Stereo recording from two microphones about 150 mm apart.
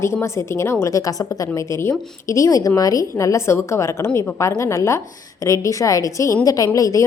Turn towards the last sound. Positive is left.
turn(degrees=20)  # may be behind; listen again after turning